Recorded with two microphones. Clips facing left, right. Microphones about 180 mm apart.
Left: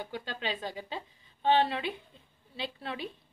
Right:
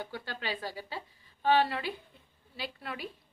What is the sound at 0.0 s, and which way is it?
A woman's voice, 20° left (ahead or behind).